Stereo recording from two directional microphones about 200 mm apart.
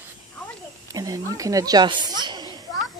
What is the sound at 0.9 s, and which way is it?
Speech, 15° right (ahead or behind).